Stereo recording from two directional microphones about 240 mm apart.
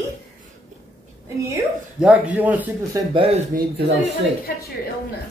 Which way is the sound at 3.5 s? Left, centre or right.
Right.